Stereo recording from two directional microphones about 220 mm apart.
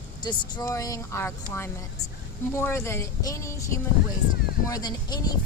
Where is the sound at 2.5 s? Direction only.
10° left (ahead or behind).